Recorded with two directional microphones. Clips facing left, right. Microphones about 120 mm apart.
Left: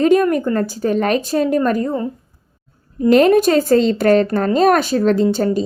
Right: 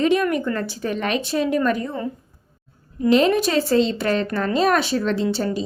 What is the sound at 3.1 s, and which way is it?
A woman's voice, 50° left (ahead or behind).